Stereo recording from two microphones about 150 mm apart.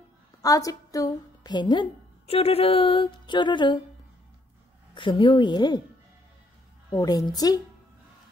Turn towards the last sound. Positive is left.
turn(degrees=25)  # may be behind; listen again after turning